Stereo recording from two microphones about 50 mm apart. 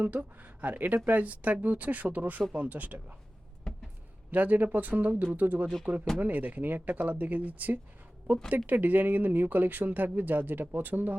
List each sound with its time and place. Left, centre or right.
0.0 s speech: right
3.7 s a sound: centre
4.3 s speech: right